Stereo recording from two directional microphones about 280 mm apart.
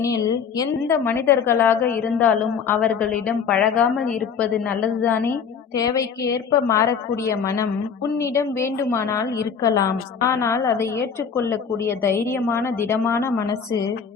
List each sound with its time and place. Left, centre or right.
0.0 s a woman's voice: centre